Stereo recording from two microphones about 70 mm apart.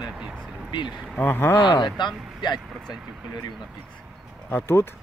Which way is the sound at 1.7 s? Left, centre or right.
Left.